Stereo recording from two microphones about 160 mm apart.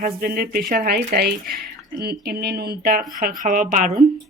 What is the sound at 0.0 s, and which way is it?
Speech, 70° right (ahead or behind).